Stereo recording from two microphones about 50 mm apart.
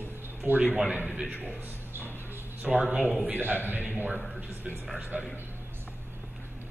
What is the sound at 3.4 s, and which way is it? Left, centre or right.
Speech, right.